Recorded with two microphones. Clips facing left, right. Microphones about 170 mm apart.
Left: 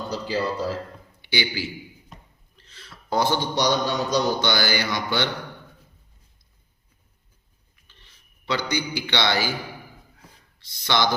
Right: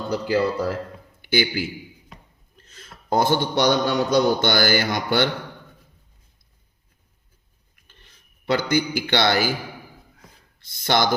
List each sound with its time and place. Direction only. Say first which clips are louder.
0.1 s a man's voice: right 6 dB; 55° right (ahead or behind)
7.9 s a man's voice: right 3 dB; 50° right (ahead or behind)
10.6 s a man's voice: right 2 dB; 50° right (ahead or behind)